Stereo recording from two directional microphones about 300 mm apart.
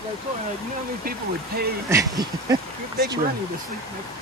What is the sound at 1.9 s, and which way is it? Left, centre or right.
Speech, centre.